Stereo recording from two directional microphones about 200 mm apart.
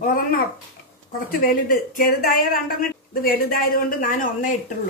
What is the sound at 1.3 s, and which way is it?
A woman's voice, 45° left (ahead or behind).